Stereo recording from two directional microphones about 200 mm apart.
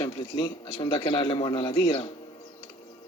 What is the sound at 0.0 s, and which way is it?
A man's voice, 25° left (ahead or behind).